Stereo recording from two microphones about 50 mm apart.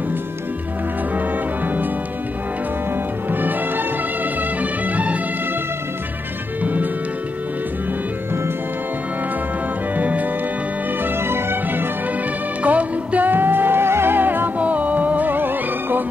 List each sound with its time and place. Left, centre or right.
3.3 s music: right
6.6 s music: right
9.9 s music: right
11.1 s music: right
12.6 s music: right
14.6 s music: right